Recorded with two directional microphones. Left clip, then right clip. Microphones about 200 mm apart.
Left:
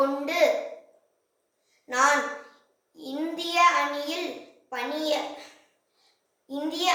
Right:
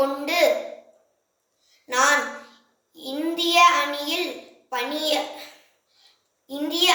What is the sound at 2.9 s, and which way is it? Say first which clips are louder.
A woman's voice: right 5 dB; 15° left (ahead or behind).